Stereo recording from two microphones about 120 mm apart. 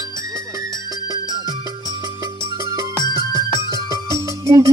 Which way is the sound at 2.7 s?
25° right (ahead or behind).